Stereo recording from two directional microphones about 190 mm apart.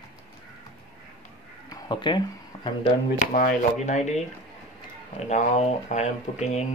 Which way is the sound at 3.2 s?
40° left (ahead or behind).